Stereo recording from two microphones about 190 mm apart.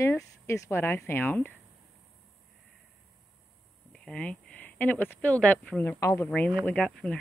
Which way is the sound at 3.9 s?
5° left (ahead or behind).